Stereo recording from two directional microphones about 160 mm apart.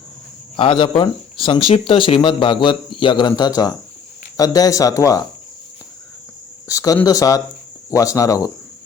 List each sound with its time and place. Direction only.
0.5 s speech: 30° left (ahead or behind)
6.7 s speech: 20° left (ahead or behind)